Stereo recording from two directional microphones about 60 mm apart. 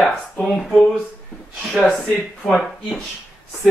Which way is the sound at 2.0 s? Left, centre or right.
Centre.